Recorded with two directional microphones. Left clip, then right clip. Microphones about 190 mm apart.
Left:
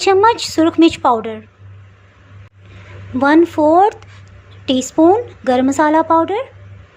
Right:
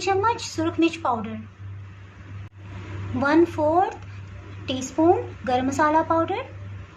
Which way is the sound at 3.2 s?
35° left (ahead or behind).